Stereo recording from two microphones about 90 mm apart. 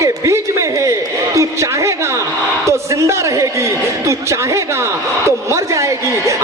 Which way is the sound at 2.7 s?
35° right (ahead or behind).